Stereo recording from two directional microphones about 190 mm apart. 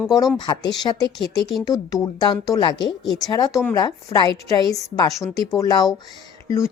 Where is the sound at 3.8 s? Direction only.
25° left (ahead or behind).